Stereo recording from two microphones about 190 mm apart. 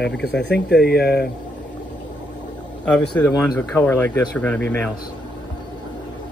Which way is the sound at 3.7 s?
10° left (ahead or behind).